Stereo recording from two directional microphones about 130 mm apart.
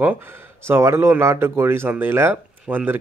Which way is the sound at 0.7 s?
20° right (ahead or behind).